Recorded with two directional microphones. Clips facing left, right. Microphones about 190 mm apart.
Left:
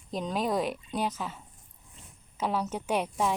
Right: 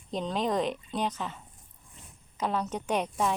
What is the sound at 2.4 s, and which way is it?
Speech, 10° left (ahead or behind).